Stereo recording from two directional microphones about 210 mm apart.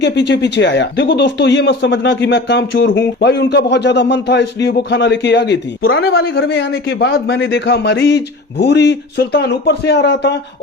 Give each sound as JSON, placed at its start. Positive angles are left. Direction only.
{"t": 0.0, "sound": "a man's voice", "side_deg": 55}